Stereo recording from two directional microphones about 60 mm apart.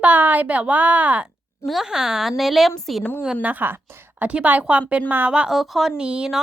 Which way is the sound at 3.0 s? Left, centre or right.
Left.